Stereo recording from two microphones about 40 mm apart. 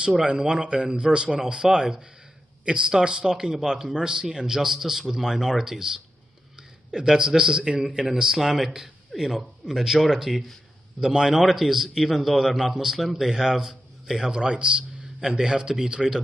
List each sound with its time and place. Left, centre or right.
0.2 s a man's voice: right; by 10.4 s centre
11.0 s a man's voice: centre
11.3 s a man's voice: centre